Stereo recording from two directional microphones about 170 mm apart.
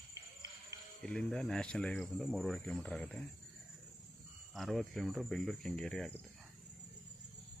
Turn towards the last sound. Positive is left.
turn(degrees=5)  # may be behind; listen again after turning